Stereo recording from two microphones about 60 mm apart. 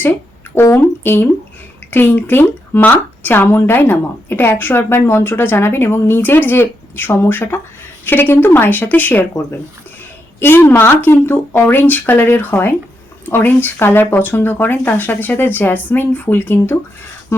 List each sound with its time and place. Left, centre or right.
0.5 s speech: left
10.4 s speech: left